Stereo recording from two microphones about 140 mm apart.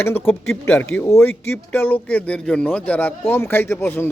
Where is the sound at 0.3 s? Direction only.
15° left (ahead or behind).